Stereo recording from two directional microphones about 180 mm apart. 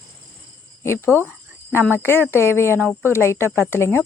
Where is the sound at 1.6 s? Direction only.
10° left (ahead or behind).